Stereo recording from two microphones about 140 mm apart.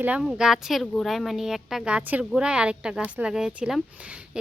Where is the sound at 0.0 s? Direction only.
10° right (ahead or behind).